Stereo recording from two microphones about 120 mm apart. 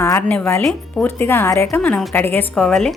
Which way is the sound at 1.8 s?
5° left (ahead or behind).